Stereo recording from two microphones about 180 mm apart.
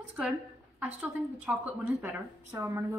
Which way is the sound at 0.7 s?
10° right (ahead or behind).